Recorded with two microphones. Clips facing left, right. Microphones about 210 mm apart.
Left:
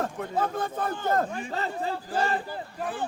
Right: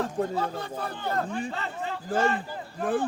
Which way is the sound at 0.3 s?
50° left (ahead or behind).